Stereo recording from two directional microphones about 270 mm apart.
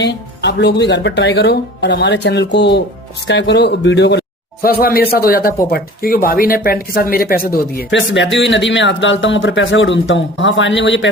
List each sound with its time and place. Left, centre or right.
0.0 s speech: left